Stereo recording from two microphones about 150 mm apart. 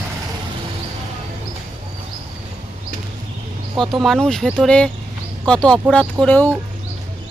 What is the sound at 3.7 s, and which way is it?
Speech, centre (ahead or behind).